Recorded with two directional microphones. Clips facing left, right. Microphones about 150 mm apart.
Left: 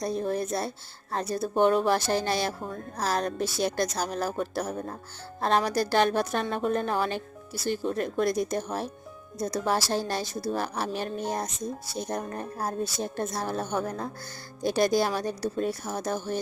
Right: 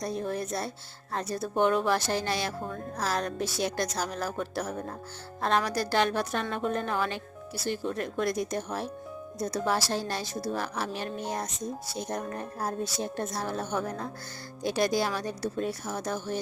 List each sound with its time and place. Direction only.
0.0 s a woman's voice: 30° left (ahead or behind)